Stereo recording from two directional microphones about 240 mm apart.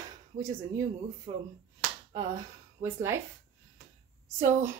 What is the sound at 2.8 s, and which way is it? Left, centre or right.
Speech, right.